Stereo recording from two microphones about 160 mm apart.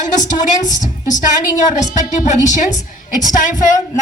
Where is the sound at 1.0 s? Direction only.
50° left (ahead or behind).